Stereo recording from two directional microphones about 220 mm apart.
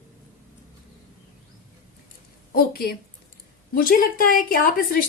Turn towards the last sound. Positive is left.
turn(degrees=40)  # may be behind; listen again after turning